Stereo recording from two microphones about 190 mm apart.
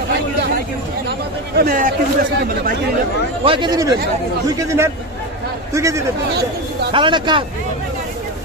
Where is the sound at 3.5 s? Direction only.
25° right (ahead or behind).